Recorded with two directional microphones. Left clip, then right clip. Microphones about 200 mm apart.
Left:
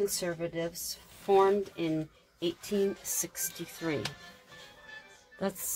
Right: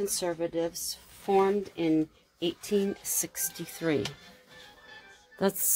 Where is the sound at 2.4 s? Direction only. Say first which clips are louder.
Right 2 dB; 45° right (ahead or behind).